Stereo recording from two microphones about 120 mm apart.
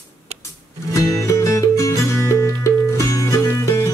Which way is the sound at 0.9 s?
25° left (ahead or behind).